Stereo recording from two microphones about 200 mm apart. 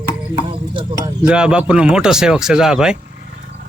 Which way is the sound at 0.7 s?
25° right (ahead or behind).